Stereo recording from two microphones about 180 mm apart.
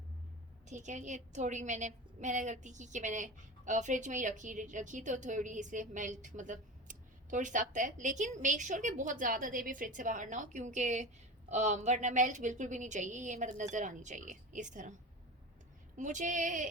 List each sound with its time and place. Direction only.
0.7 s a woman's voice: 40° right (ahead or behind)
16.0 s a woman's voice: 45° right (ahead or behind)